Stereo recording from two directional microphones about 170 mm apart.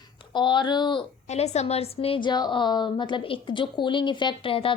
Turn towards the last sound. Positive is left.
turn(degrees=30)  # may be behind; listen again after turning